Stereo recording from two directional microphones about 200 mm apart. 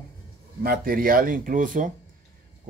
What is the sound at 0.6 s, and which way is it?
Speech, 45° right (ahead or behind).